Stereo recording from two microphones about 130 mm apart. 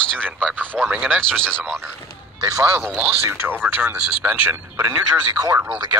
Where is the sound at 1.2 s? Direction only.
5° left (ahead or behind).